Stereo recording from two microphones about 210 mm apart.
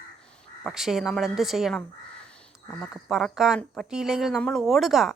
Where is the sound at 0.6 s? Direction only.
Centre (ahead or behind).